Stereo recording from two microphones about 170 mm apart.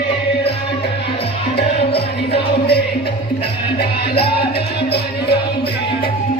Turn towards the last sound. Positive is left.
turn(degrees=70)  # may be behind; listen again after turning